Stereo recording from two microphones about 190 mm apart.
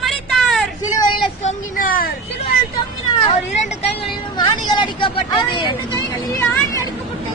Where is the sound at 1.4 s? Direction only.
45° left (ahead or behind).